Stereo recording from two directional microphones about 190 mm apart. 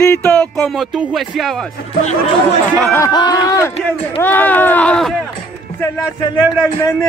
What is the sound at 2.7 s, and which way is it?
A man's voice, 10° left (ahead or behind).